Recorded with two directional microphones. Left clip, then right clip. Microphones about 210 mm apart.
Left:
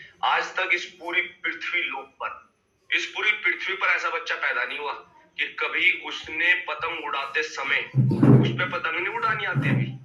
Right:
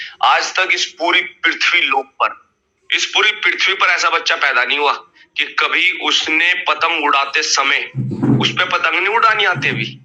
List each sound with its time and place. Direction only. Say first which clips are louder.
0.0 s a man's voice: right 10 dB; 40° right (ahead or behind)